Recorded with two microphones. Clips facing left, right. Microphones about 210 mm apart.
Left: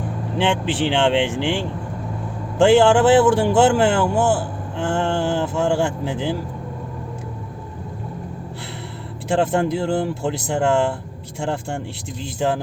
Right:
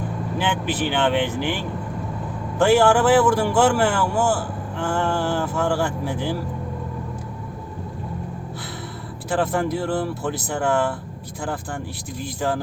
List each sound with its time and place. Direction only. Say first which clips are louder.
0.3 s a man's voice: left 4 dB; 25° left (ahead or behind)
9.3 s a man's voice: left 3 dB; 25° left (ahead or behind)